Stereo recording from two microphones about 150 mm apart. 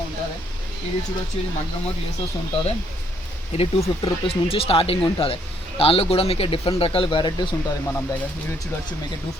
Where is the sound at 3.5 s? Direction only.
40° left (ahead or behind).